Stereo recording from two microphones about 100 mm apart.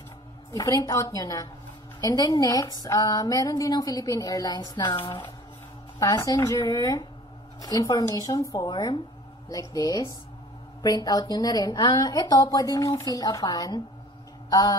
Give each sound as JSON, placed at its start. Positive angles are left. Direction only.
{"t": 0.6, "sound": "speech", "side_deg": 40}
{"t": 5.9, "sound": "speech", "side_deg": 35}
{"t": 14.5, "sound": "honk", "side_deg": 40}